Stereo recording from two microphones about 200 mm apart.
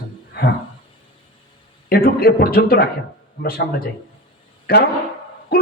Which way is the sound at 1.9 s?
50° left (ahead or behind).